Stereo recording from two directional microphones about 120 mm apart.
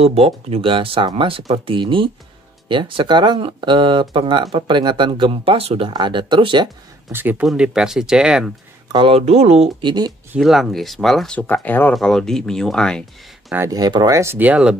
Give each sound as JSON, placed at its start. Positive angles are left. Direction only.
{"t": 0.0, "sound": "speech", "side_deg": -55}
{"t": 7.1, "sound": "speech", "side_deg": -15}
{"t": 8.9, "sound": "speech", "side_deg": -50}
{"t": 9.8, "sound": "speech", "side_deg": -40}
{"t": 10.4, "sound": "speech", "side_deg": 0}
{"t": 11.3, "sound": "speech", "side_deg": 15}
{"t": 11.9, "sound": "speech", "side_deg": 5}
{"t": 13.6, "sound": "speech", "side_deg": -30}